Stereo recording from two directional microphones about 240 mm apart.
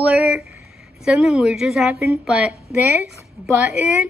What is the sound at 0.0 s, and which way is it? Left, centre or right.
A woman's voice, centre.